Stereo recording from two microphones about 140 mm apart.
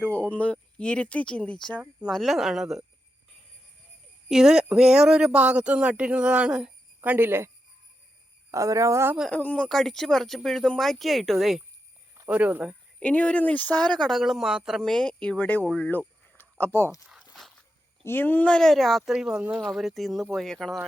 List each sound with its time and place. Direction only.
0.0 s speech: 10° left (ahead or behind)
1.8 s speech: 10° right (ahead or behind)
4.3 s speech: 5° right (ahead or behind); by 9.1 s 20° right (ahead or behind)
9.3 s speech: 10° left (ahead or behind)
12.3 s speech: 10° right (ahead or behind)
13.0 s speech: 10° left (ahead or behind)
15.9 s a sound: 10° left (ahead or behind)
18.0 s speech: 15° left (ahead or behind)